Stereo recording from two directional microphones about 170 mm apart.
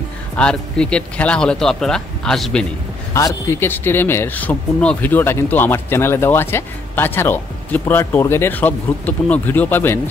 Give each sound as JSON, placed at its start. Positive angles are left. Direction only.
{"t": 0.4, "sound": "speech", "side_deg": 5}
{"t": 3.1, "sound": "speech", "side_deg": 20}